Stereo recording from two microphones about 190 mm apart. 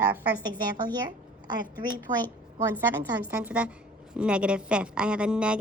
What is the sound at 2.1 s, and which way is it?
Speech, 40° right (ahead or behind).